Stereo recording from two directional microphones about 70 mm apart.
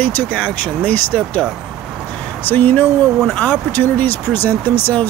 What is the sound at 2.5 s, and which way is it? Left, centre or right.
Speech, left.